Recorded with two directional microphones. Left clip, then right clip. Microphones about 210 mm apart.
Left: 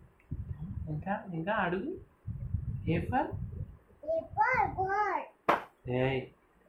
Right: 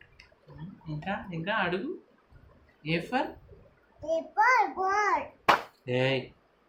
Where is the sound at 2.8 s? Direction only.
25° right (ahead or behind).